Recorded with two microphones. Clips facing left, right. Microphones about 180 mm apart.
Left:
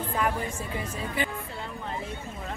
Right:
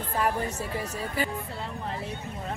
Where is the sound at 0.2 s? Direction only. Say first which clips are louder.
Right 2 dB; 40° right (ahead or behind).